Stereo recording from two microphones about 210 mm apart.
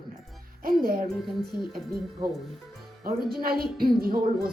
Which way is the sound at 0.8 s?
45° right (ahead or behind).